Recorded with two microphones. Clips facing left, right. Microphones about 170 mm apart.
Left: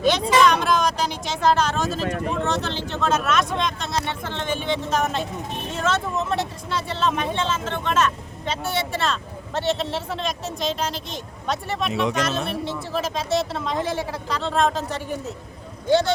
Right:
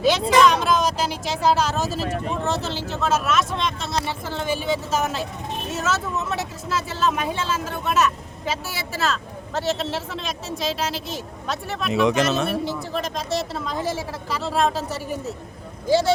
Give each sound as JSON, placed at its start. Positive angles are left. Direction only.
{"t": 0.0, "sound": "speech", "side_deg": -5}
{"t": 12.0, "sound": "speech", "side_deg": -70}
{"t": 12.5, "sound": "speech", "side_deg": 0}